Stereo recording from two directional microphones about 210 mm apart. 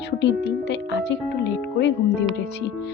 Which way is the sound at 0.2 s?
55° left (ahead or behind).